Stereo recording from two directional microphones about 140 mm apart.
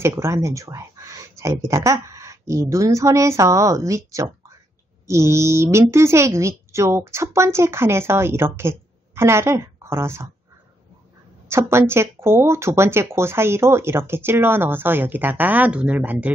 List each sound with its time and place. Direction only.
0.0 s a woman's voice: 20° right (ahead or behind)
11.4 s speech: 20° right (ahead or behind)